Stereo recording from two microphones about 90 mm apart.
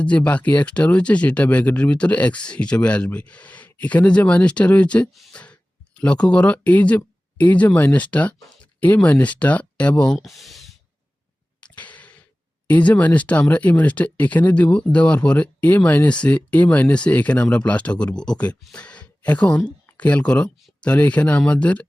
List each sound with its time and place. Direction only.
0.0 s speech: 15° left (ahead or behind)
10.2 s speech: centre (ahead or behind)
11.6 s a sound: 15° left (ahead or behind)
12.6 s speech: 15° left (ahead or behind)